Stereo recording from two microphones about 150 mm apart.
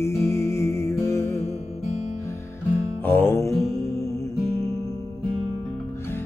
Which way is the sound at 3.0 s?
15° left (ahead or behind).